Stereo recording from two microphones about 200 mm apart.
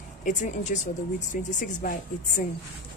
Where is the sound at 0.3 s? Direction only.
40° left (ahead or behind).